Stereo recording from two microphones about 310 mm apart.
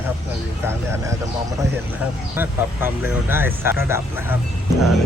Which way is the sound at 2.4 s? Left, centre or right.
Centre.